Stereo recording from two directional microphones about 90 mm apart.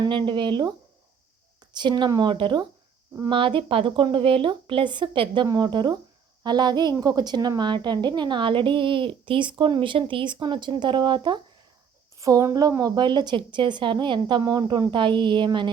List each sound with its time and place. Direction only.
0.1 s a woman's voice: 65° right (ahead or behind)
1.7 s a woman's voice: 55° right (ahead or behind)
5.5 s a woman's voice: 50° right (ahead or behind)
12.1 s a woman's voice: 40° right (ahead or behind)
13.0 s a woman's voice: 55° right (ahead or behind)